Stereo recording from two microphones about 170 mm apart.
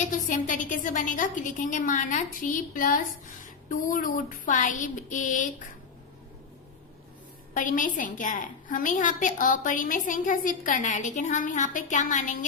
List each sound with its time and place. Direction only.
0.1 s a woman's voice: 50° left (ahead or behind)
7.5 s a woman's voice: 50° left (ahead or behind)